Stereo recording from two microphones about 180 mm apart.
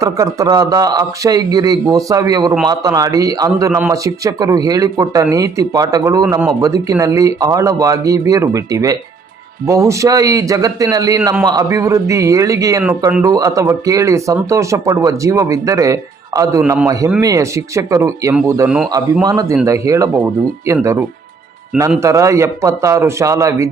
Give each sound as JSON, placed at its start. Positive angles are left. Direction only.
{"t": 0.0, "sound": "speech", "side_deg": -20}